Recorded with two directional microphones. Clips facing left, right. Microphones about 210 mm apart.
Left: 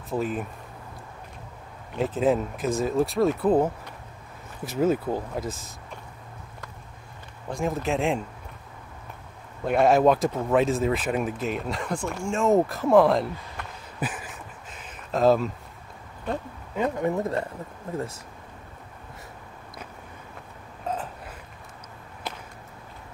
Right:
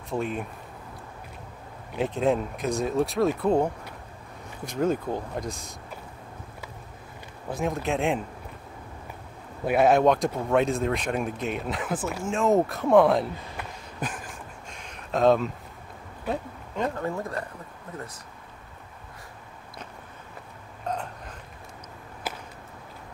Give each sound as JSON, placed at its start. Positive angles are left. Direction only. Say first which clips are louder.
{"t": 0.1, "sound": "speech", "louder": "left 1 dB", "side_deg": 0}
{"t": 2.0, "sound": "speech", "louder": "left 1 dB", "side_deg": 5}
{"t": 7.4, "sound": "speech", "louder": "left 1 dB", "side_deg": 0}
{"t": 9.7, "sound": "speech", "louder": "left 1 dB", "side_deg": 0}
{"t": 16.7, "sound": "speech", "louder": "left 2 dB", "side_deg": 10}
{"t": 17.0, "sound": "speech", "louder": "left 5 dB", "side_deg": 20}
{"t": 20.8, "sound": "burping", "louder": "left 1 dB", "side_deg": 5}
{"t": 22.3, "sound": "a sound", "louder": "right 1 dB", "side_deg": -5}